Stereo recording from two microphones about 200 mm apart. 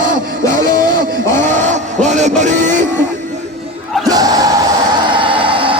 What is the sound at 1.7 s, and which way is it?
Music, 35° right (ahead or behind).